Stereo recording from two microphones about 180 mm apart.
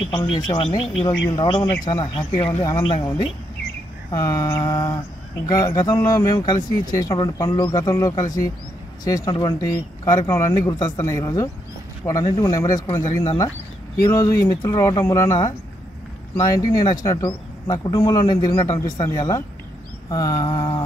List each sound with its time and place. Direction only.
0.0 s speech: 25° left (ahead or behind)